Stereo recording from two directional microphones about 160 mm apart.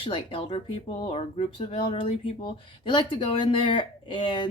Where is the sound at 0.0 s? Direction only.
35° left (ahead or behind).